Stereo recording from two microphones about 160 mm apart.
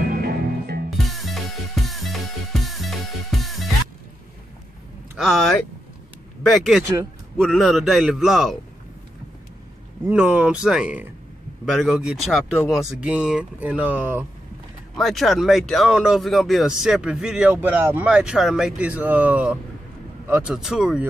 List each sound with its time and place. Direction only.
0.1 s music: 70° right (ahead or behind)
0.8 s music: centre (ahead or behind)
5.1 s speech: centre (ahead or behind)
10.0 s speech: 10° right (ahead or behind)
15.0 s speech: centre (ahead or behind)